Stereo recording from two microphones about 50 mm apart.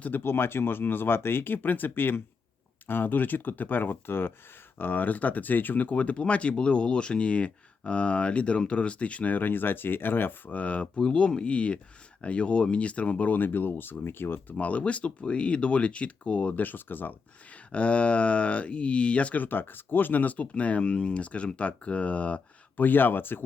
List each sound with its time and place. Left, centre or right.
0.0 s speech: left
4.8 s speech: left
10.5 s speech: left
16.6 s speech: left
17.5 s speech: left
22.8 s speech: left